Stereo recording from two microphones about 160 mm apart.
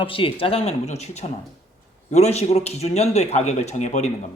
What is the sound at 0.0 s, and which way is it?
A man's voice, 35° left (ahead or behind).